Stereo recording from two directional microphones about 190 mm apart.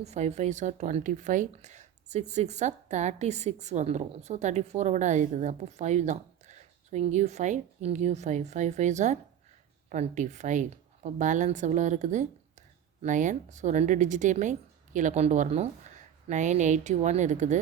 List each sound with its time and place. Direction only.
0.0 s a woman's voice: 35° right (ahead or behind)